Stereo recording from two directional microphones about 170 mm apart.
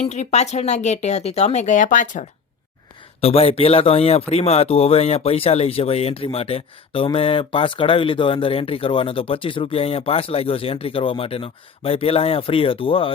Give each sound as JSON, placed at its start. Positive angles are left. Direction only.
{"t": 0.0, "sound": "speech", "side_deg": 40}
{"t": 3.2, "sound": "speech", "side_deg": 35}